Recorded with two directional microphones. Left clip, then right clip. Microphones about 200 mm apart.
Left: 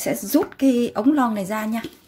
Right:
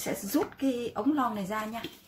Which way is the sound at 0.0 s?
40° left (ahead or behind).